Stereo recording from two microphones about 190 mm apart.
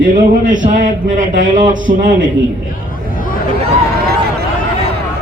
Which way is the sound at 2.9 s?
45° left (ahead or behind).